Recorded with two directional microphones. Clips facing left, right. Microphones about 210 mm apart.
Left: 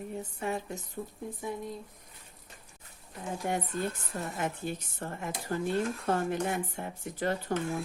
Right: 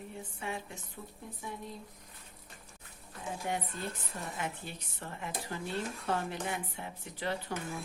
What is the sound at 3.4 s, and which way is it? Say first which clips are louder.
Speech: left 6 dB; 50° left (ahead or behind).